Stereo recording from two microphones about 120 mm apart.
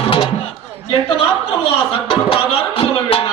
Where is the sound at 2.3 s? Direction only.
50° left (ahead or behind).